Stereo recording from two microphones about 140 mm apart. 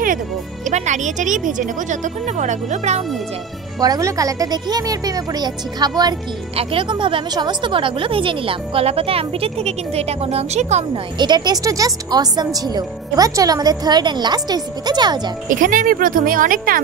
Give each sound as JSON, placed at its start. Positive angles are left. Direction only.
{"t": 0.7, "sound": "a woman's voice", "side_deg": -60}
{"t": 3.8, "sound": "speech", "side_deg": -25}
{"t": 6.5, "sound": "speech", "side_deg": -40}
{"t": 11.1, "sound": "speech", "side_deg": -30}
{"t": 15.4, "sound": "speech", "side_deg": -70}